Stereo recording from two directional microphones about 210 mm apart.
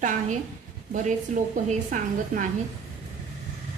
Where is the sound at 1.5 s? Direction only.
40° right (ahead or behind).